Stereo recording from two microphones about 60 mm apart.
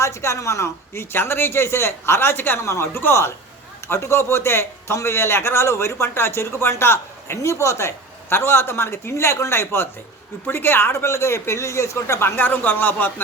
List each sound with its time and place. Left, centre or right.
0.0 s a man's voice: left
12.4 s speech: left